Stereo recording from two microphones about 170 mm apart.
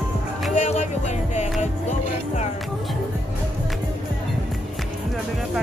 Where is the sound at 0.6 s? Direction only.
45° left (ahead or behind).